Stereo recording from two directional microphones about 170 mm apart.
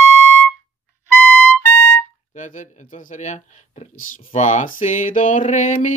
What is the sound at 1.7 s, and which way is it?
Music, 15° left (ahead or behind).